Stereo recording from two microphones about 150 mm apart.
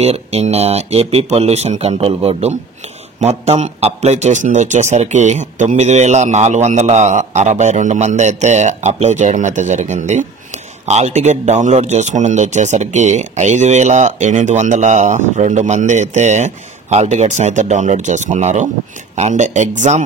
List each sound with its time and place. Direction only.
0.0 s speech: 45° right (ahead or behind)